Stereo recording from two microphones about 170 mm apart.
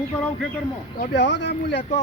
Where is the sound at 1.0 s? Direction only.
90° left.